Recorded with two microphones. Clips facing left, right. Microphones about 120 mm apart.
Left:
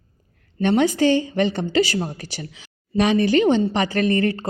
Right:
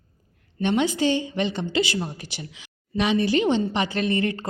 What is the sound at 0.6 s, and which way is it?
A woman's voice, 45° left (ahead or behind).